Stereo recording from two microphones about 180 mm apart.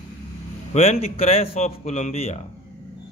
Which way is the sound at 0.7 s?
35° left (ahead or behind).